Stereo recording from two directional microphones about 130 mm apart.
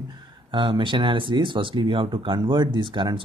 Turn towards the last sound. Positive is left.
turn(degrees=-40)  # may be behind; listen again after turning